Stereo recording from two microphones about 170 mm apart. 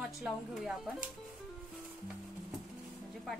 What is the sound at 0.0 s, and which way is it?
Speech, centre (ahead or behind).